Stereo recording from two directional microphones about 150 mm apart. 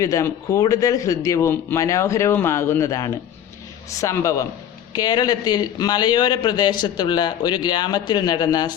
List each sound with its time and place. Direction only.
0.0 s a man's voice: 20° left (ahead or behind)